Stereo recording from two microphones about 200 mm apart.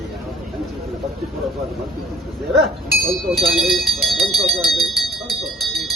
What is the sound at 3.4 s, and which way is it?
Speech, centre (ahead or behind).